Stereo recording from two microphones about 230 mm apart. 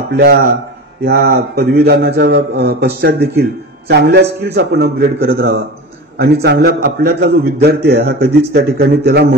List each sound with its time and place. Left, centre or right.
0.1 s a man's voice: right
6.1 s a man's voice: right